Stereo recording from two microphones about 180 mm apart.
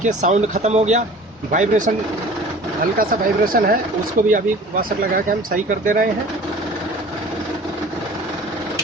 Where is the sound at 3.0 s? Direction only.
50° right (ahead or behind).